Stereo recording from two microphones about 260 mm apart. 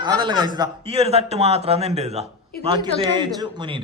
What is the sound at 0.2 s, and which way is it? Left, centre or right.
A man's voice, centre.